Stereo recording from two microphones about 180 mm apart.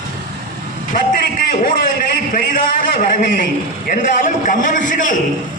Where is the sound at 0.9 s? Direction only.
50° left (ahead or behind).